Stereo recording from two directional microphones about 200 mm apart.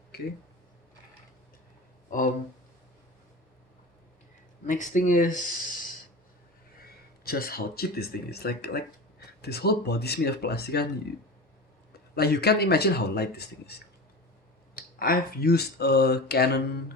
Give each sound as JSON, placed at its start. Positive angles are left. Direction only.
{"t": 0.1, "sound": "a sound", "side_deg": 50}
{"t": 4.6, "sound": "speech", "side_deg": 40}
{"t": 6.8, "sound": "speech", "side_deg": 50}
{"t": 12.1, "sound": "speech", "side_deg": 55}
{"t": 14.8, "sound": "speech", "side_deg": 50}